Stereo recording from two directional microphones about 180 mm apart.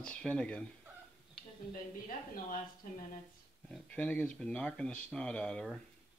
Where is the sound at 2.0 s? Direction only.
45° left (ahead or behind).